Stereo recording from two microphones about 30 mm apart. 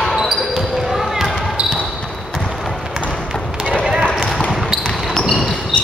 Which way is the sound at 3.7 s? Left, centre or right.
Right.